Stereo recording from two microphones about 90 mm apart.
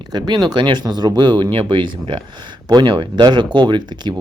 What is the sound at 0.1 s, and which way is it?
Speech, 55° right (ahead or behind).